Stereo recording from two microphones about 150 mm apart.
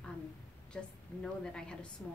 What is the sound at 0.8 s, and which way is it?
A woman's voice, 5° left (ahead or behind).